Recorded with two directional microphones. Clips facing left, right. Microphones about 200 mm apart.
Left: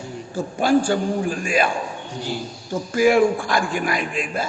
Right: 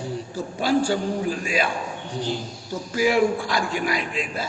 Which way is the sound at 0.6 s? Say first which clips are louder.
Left 3 dB; 50° left (ahead or behind).